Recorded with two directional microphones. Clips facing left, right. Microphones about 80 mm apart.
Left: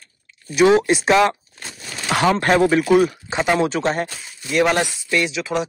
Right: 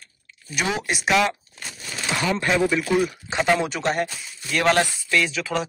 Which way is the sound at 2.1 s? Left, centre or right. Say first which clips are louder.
Left 6 dB; left.